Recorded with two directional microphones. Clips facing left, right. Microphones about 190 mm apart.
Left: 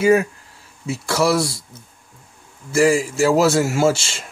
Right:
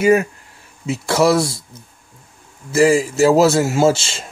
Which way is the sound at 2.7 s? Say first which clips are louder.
Right 2 dB; 20° right (ahead or behind).